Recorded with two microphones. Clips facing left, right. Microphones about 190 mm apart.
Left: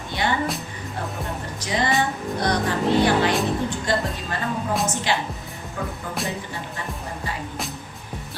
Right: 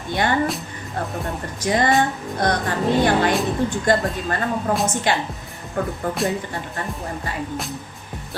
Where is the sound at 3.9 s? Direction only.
50° right (ahead or behind).